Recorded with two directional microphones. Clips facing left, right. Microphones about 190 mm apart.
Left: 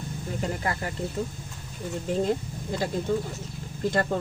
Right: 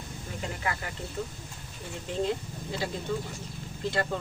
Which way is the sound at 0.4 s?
40° left (ahead or behind).